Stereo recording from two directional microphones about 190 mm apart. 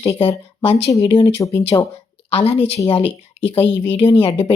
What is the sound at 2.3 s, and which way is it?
Speech, 30° left (ahead or behind).